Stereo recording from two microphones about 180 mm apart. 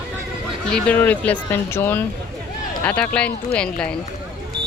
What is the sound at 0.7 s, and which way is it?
Speech, 10° left (ahead or behind).